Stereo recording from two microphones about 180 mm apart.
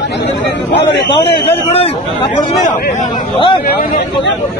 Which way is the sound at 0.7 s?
70° left (ahead or behind).